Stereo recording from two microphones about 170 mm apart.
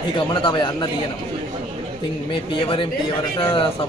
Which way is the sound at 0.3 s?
30° left (ahead or behind).